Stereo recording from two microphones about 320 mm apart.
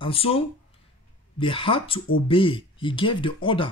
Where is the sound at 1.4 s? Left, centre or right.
Centre.